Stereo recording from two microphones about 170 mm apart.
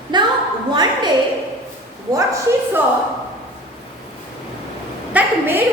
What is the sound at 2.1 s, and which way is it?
Speech, 20° right (ahead or behind).